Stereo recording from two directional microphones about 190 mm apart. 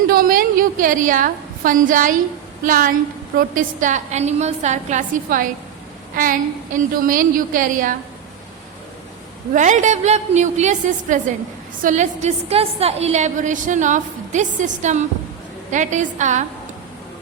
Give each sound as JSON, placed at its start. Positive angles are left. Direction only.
{"t": 0.1, "sound": "a woman's voice", "side_deg": -50}
{"t": 6.7, "sound": "a woman's voice", "side_deg": -45}
{"t": 9.5, "sound": "a woman's voice", "side_deg": -40}